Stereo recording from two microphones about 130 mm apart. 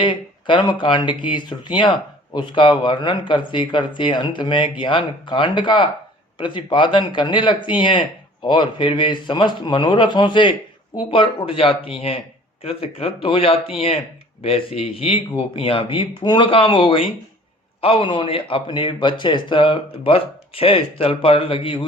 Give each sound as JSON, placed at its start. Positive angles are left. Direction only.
{"t": 0.0, "sound": "a man's voice", "side_deg": 35}